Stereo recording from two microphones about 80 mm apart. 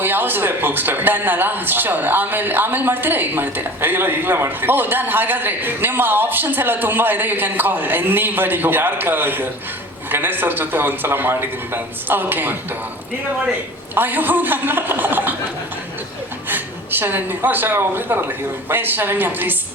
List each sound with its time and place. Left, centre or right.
0.0 s a man's voice: right
13.9 s a man's voice: right
16.5 s a man's voice: right